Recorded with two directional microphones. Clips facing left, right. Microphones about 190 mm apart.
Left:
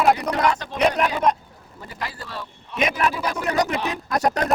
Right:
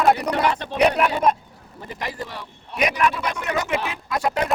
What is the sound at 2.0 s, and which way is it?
Speech, 15° right (ahead or behind).